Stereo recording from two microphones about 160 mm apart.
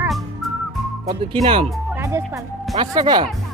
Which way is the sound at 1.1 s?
35° right (ahead or behind).